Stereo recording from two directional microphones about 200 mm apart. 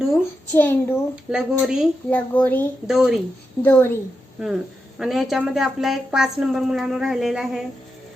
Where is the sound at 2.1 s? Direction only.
10° left (ahead or behind).